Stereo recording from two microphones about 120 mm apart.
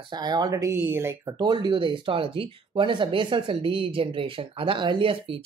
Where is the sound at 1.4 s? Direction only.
40° right (ahead or behind).